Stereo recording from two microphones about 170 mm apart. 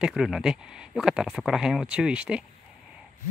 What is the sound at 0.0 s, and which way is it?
Speech, centre (ahead or behind).